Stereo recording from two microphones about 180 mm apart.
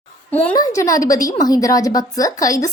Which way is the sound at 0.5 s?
20° left (ahead or behind).